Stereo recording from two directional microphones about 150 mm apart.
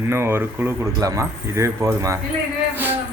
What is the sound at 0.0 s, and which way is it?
Speech, 15° right (ahead or behind).